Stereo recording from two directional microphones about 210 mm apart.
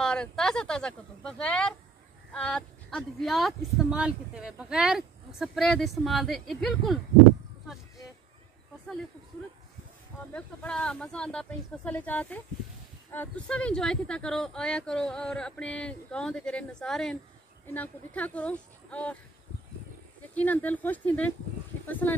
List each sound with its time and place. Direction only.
0.0 s speech: 5° left (ahead or behind)
10.3 s speech: 5° left (ahead or behind)
20.3 s speech: 10° left (ahead or behind)